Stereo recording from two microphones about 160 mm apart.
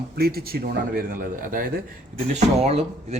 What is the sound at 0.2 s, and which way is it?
A man's voice, 75° right (ahead or behind).